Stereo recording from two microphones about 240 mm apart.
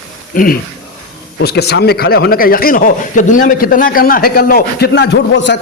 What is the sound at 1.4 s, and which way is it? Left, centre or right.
Speech, left.